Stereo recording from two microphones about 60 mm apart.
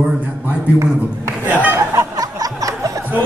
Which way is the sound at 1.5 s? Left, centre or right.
Right.